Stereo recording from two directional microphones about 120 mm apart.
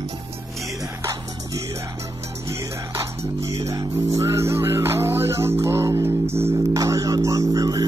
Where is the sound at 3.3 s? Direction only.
25° right (ahead or behind).